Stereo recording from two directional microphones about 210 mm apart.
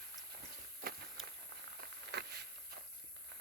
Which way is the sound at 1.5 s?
50° right (ahead or behind).